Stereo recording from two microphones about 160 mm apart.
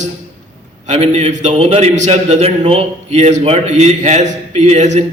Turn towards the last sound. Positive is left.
turn(degrees=-45)  # may be behind; listen again after turning